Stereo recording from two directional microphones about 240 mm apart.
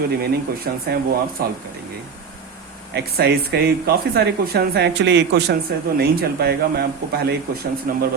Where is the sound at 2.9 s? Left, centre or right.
Right.